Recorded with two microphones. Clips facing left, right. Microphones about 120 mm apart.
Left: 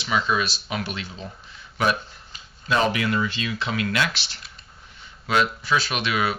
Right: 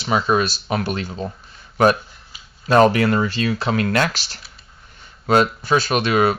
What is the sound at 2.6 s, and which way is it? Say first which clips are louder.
Speech: right 8 dB; 45° right (ahead or behind).